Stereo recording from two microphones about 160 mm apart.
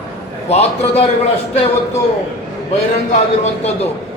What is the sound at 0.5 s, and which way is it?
Speech, 40° left (ahead or behind).